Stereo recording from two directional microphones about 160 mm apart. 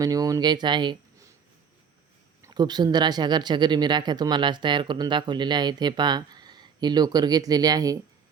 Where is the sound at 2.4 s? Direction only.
25° right (ahead or behind).